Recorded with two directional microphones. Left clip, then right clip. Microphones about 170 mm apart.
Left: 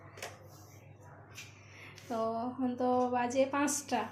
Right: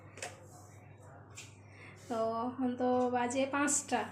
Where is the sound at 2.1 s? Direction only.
Centre (ahead or behind).